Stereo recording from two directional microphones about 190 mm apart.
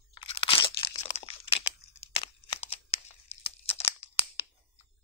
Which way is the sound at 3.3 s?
35° left (ahead or behind).